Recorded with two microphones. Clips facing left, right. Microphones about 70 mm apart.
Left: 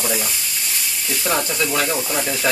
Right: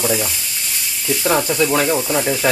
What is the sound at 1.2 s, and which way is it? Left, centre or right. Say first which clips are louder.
Speech: right 5 dB; centre.